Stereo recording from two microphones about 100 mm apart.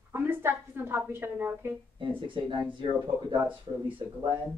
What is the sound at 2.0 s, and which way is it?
Speech, 55° right (ahead or behind).